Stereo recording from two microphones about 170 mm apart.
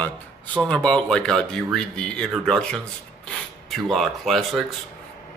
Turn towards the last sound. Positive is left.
turn(degrees=0)  # may be behind; listen again after turning